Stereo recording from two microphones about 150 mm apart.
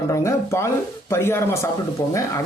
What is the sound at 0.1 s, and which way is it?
A man's voice, 20° left (ahead or behind).